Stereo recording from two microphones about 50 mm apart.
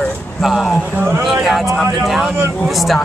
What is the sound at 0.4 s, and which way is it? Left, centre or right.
Speech, centre.